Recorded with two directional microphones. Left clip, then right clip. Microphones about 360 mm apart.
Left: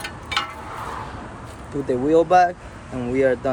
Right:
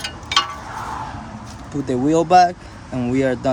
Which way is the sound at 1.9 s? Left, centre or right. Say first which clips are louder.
Right 1 dB; right.